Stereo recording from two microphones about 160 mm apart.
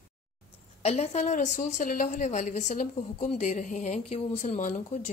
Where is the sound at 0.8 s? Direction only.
40° left (ahead or behind).